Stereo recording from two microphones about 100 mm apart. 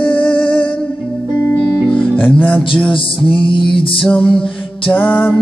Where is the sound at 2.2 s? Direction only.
15° left (ahead or behind).